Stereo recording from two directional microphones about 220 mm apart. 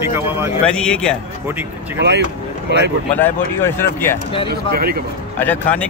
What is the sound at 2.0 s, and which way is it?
Speech, 50° right (ahead or behind).